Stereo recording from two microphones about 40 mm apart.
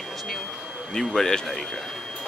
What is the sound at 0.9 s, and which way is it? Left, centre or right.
Speech, centre.